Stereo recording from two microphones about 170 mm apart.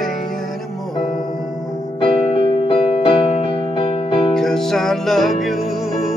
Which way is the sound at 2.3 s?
30° left (ahead or behind).